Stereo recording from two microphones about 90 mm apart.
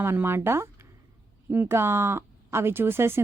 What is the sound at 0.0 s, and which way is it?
Speech, 25° right (ahead or behind).